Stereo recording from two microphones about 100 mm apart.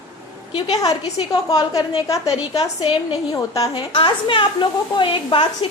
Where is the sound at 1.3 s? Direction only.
40° left (ahead or behind).